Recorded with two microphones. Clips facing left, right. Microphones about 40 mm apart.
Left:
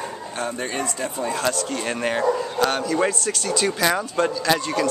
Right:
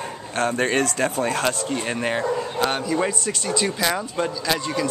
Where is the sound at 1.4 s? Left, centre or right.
Right.